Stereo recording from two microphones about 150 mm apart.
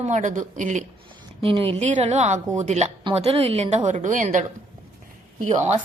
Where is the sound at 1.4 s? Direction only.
40° right (ahead or behind).